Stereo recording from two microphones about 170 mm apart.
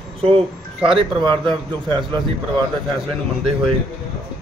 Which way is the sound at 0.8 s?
35° right (ahead or behind).